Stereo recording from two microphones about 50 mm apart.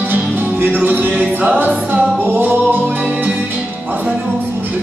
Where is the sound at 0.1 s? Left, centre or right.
Right.